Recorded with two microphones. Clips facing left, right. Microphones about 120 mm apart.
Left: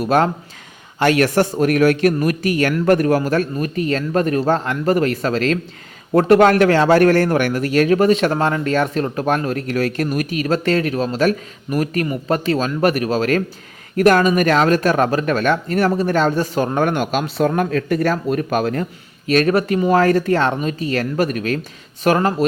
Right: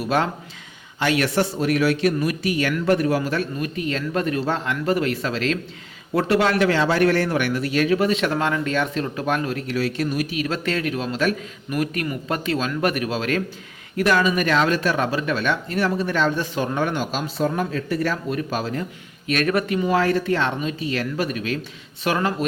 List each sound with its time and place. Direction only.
0.0 s a man's voice: 45° left (ahead or behind); by 18.9 s 60° left (ahead or behind)
19.3 s a man's voice: 35° left (ahead or behind)